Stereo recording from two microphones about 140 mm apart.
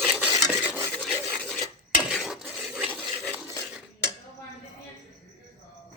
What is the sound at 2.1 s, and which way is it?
Dishes, centre (ahead or behind).